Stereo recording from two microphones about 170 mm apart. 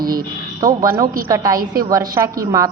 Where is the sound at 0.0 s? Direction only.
60° right (ahead or behind).